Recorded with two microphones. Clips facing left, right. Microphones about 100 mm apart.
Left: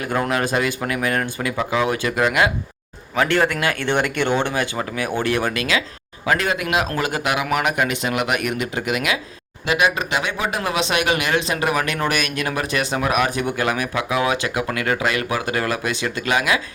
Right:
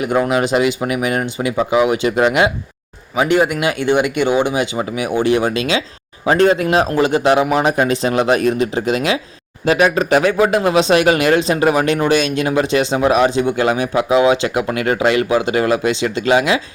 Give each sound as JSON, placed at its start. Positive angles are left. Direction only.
{"t": 0.0, "sound": "speech", "side_deg": -15}